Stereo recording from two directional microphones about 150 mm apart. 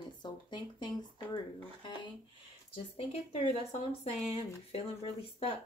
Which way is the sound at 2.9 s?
40° left (ahead or behind).